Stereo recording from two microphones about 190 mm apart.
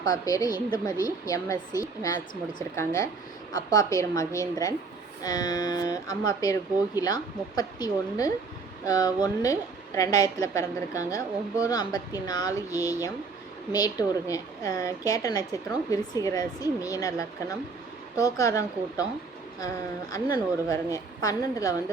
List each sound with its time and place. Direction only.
0.0 s a woman's voice: 20° left (ahead or behind)